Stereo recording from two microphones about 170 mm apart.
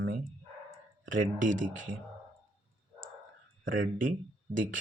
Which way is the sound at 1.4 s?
50° right (ahead or behind).